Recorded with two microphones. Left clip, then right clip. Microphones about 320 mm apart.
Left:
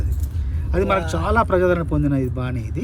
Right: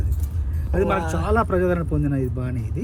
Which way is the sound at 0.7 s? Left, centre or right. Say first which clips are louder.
Left 2 dB; centre.